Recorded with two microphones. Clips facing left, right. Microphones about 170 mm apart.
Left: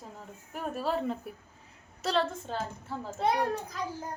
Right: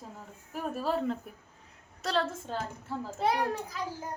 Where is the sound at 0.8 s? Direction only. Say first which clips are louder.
Even; centre (ahead or behind).